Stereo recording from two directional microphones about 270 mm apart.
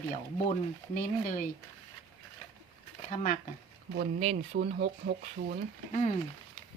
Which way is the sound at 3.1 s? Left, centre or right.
Left.